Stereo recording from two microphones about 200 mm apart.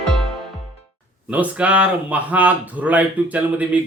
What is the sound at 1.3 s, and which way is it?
Speech, 5° right (ahead or behind).